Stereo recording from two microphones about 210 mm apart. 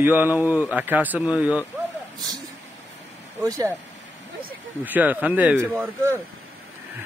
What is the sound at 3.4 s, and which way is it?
Speech, 15° right (ahead or behind).